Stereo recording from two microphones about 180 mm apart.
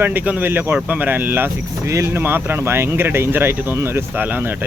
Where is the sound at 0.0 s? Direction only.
10° right (ahead or behind).